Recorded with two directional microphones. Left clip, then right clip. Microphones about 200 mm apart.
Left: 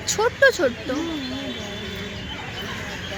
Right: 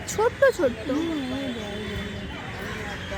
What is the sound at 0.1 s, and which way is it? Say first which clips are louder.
Speech: left 3 dB; 10° right (ahead or behind).